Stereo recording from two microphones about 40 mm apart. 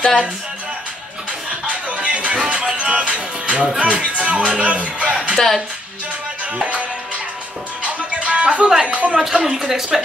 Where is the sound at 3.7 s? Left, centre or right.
Right.